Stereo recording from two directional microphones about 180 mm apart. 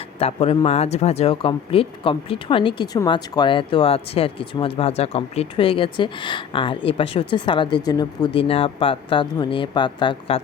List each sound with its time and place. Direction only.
0.2 s speech: 35° left (ahead or behind)